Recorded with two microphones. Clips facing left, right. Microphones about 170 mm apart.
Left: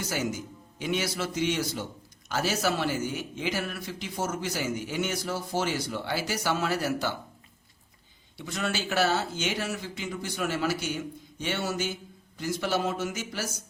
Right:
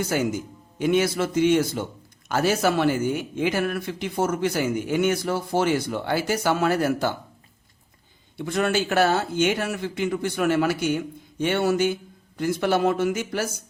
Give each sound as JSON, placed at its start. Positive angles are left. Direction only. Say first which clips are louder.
{"t": 0.0, "sound": "speech", "louder": "right 7 dB", "side_deg": -55}
{"t": 8.4, "sound": "speech", "louder": "right 9 dB", "side_deg": -55}